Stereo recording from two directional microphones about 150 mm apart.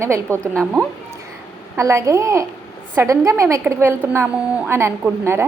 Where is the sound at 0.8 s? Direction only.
Centre (ahead or behind).